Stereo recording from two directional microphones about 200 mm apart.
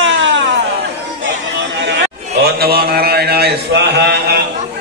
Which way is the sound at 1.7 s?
60° right (ahead or behind).